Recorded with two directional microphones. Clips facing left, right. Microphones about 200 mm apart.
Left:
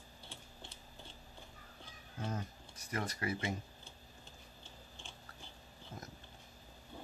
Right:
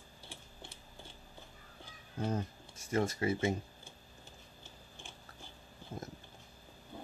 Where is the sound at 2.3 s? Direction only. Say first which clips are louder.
Right 5 dB; 30° right (ahead or behind).